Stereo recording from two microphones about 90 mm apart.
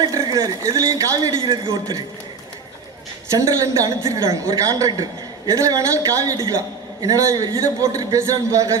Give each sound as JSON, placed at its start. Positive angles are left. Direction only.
{"t": 0.0, "sound": "a woman's voice", "side_deg": -45}
{"t": 1.4, "sound": "a man's voice", "side_deg": -65}
{"t": 3.2, "sound": "a woman's voice", "side_deg": -35}